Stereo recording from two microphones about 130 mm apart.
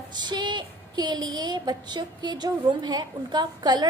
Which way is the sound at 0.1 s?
35° right (ahead or behind).